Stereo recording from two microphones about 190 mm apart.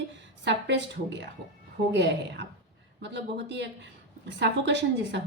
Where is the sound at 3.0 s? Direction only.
65° right (ahead or behind).